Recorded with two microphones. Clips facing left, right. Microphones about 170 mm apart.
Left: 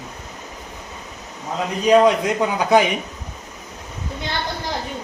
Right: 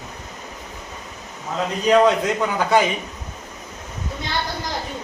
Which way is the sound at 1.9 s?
15° left (ahead or behind).